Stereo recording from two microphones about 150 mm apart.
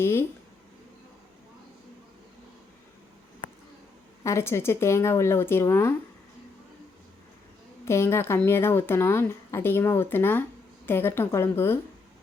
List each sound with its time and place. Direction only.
0.0 s speech: 15° left (ahead or behind)
4.2 s speech: 20° left (ahead or behind)
7.9 s speech: 15° left (ahead or behind)